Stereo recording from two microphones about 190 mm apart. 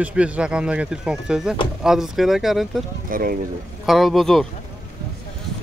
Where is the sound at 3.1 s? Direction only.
50° right (ahead or behind).